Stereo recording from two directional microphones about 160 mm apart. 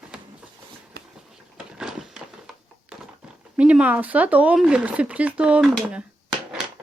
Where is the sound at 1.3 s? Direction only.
5° right (ahead or behind).